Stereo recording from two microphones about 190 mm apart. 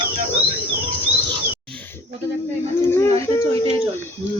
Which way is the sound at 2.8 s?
15° left (ahead or behind).